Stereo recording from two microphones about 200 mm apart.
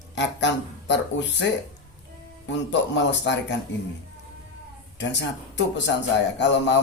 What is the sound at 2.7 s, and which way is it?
Speech, 65° left (ahead or behind).